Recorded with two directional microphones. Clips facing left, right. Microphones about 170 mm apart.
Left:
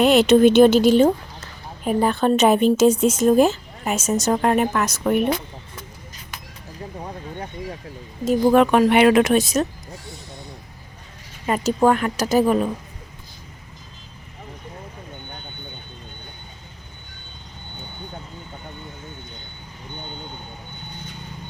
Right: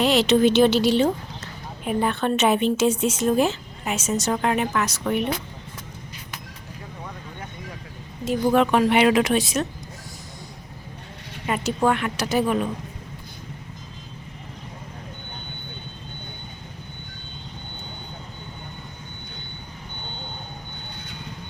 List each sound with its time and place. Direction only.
0.0 s a woman's voice: 55° left (ahead or behind)
7.0 s vehicle: 35° left (ahead or behind)
8.2 s a woman's voice: 45° left (ahead or behind)
11.4 s speech: 40° left (ahead or behind)